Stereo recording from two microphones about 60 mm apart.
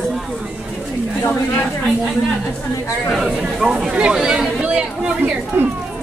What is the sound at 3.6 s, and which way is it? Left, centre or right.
Speech, centre.